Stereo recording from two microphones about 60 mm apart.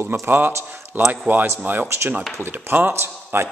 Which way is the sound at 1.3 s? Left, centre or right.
Right.